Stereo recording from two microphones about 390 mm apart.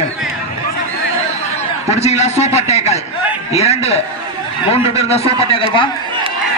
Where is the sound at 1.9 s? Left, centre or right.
Centre.